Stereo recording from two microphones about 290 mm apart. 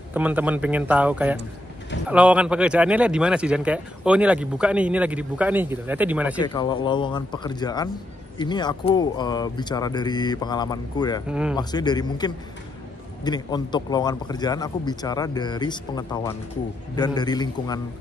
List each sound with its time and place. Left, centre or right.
0.1 s speech: centre
6.4 s a man's voice: centre
11.2 s speech: centre
11.5 s a man's voice: centre